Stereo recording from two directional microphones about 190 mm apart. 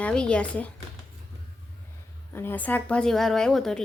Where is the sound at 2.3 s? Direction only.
10° left (ahead or behind).